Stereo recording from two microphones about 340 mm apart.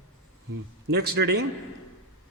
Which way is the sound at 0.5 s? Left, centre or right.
Right.